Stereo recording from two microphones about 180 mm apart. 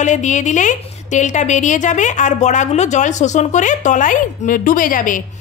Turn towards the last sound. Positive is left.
turn(degrees=50)  # may be behind; listen again after turning